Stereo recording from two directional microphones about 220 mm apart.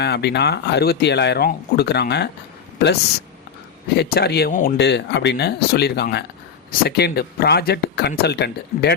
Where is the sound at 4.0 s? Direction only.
45° left (ahead or behind).